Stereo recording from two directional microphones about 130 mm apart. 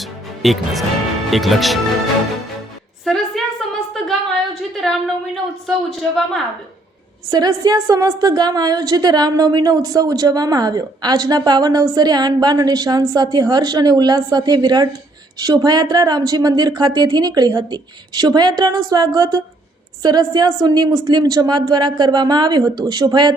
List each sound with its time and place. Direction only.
0.0 s music: centre (ahead or behind)
1.3 s speech: centre (ahead or behind)
3.0 s a sound: 5° left (ahead or behind)
7.3 s a woman's voice: 30° right (ahead or behind)